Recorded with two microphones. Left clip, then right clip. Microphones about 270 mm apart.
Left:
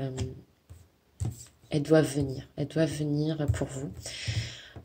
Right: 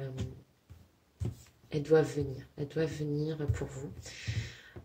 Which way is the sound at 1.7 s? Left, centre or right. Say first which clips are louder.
Left 3 dB; left.